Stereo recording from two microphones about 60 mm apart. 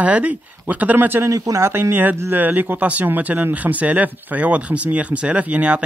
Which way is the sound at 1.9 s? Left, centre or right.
Right.